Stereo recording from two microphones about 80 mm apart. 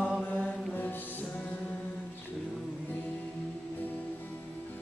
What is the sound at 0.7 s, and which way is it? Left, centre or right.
Music, left.